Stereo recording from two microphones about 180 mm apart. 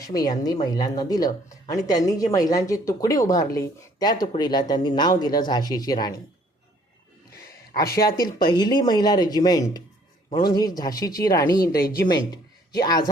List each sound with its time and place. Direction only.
0.0 s speech: 20° left (ahead or behind)
7.8 s speech: 60° left (ahead or behind)
8.0 s speech: 25° left (ahead or behind)
11.8 s speech: 55° left (ahead or behind)
12.0 s speech: 20° left (ahead or behind)